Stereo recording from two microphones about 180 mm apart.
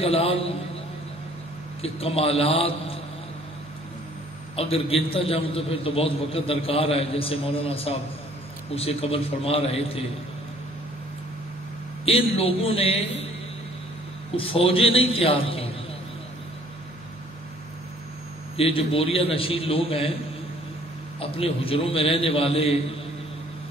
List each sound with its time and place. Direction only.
0.0 s a man's voice: 35° left (ahead or behind)
1.8 s a man's voice: 35° left (ahead or behind)
4.6 s a man's voice: 35° left (ahead or behind)
12.0 s a man's voice: 30° left (ahead or behind)
14.3 s a man's voice: 30° left (ahead or behind)
18.6 s a man's voice: 30° left (ahead or behind)
21.2 s a man's voice: 30° left (ahead or behind)